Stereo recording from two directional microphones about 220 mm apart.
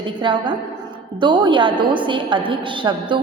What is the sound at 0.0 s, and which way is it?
A woman's voice, 20° right (ahead or behind).